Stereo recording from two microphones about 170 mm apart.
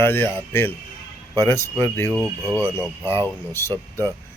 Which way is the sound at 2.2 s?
20° right (ahead or behind).